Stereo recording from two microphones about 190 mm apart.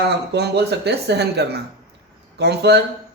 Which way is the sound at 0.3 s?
60° right (ahead or behind).